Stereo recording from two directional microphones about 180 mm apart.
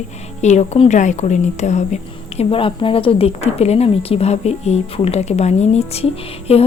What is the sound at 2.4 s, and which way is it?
Speech, 30° left (ahead or behind).